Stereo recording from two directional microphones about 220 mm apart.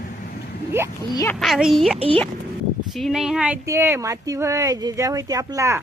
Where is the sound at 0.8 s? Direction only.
10° right (ahead or behind).